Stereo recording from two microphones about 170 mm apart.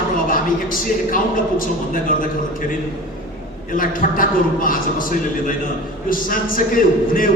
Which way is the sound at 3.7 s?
55° left (ahead or behind).